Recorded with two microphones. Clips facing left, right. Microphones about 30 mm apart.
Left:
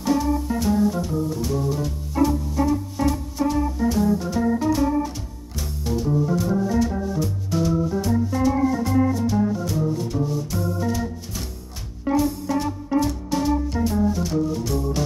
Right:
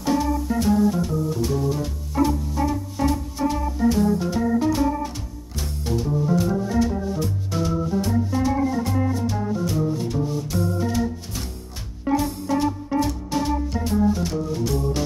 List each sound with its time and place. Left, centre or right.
0.0 s music: centre
14.5 s organ: centre